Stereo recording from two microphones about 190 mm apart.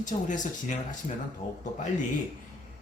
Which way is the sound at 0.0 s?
40° left (ahead or behind).